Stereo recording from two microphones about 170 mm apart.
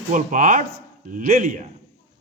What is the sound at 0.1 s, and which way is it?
A man's voice, 50° right (ahead or behind).